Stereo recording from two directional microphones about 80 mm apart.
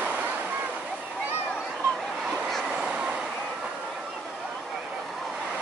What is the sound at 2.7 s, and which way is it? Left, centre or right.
Train, centre.